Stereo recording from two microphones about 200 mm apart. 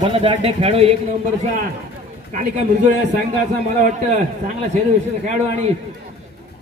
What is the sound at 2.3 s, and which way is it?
A man's voice, 35° right (ahead or behind).